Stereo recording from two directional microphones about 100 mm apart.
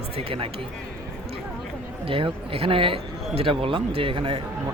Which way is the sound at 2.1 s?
65° right (ahead or behind).